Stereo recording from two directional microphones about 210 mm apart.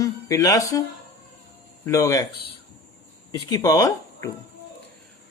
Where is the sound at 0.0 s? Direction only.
15° left (ahead or behind).